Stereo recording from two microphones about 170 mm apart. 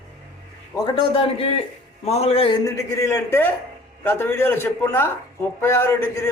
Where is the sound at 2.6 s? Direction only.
20° left (ahead or behind).